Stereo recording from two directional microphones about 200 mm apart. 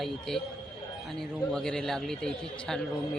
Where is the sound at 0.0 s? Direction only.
Centre (ahead or behind).